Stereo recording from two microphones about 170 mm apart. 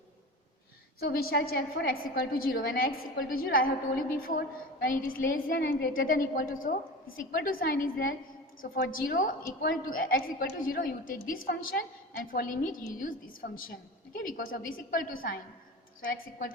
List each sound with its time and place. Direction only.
0.9 s a woman's voice: 60° left (ahead or behind)
4.8 s a woman's voice: 55° left (ahead or behind)